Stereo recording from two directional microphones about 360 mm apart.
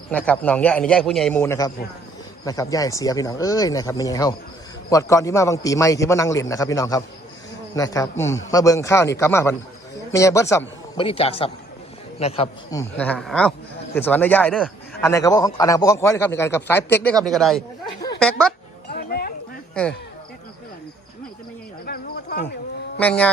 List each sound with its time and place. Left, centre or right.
0.1 s a man's voice: centre
13.0 s a man's voice: centre
18.9 s a sound: left
21.8 s cricket: left
23.0 s a man's voice: centre